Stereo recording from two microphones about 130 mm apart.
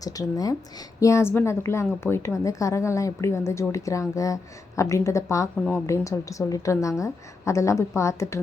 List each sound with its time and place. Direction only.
0.0 s a woman's voice: 30° left (ahead or behind)